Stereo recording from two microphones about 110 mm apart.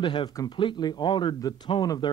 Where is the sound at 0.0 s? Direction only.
45° left (ahead or behind).